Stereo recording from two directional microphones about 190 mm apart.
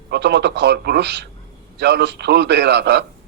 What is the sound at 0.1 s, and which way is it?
Speech, 60° right (ahead or behind).